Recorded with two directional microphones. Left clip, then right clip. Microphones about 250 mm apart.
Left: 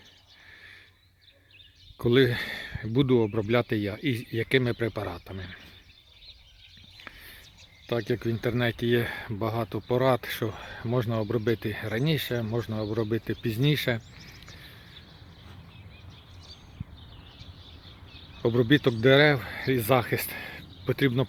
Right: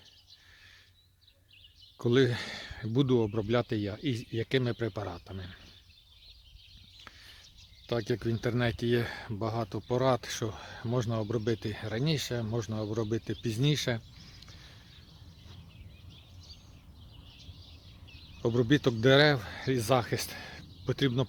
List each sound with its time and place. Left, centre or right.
2.0 s speech: centre
7.0 s a sound: centre
7.9 s speech: centre
18.4 s speech: centre